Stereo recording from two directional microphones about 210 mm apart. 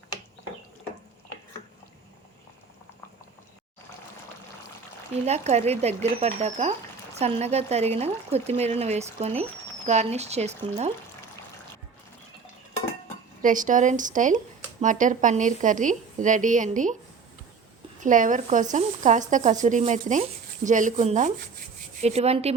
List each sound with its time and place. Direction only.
5.2 s speech: 30° right (ahead or behind)
13.4 s speech: 40° right (ahead or behind)
18.0 s speech: 40° right (ahead or behind)